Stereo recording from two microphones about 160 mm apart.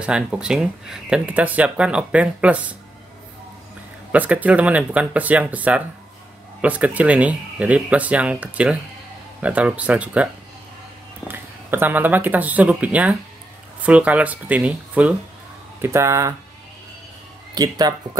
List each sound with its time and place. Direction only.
0.0 s speech: 5° right (ahead or behind)
4.1 s speech: 10° right (ahead or behind)
17.6 s speech: 25° right (ahead or behind)